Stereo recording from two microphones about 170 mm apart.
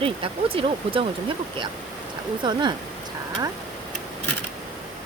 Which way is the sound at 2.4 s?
25° right (ahead or behind).